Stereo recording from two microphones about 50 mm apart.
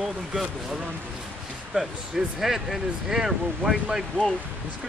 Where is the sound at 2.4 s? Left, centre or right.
Centre.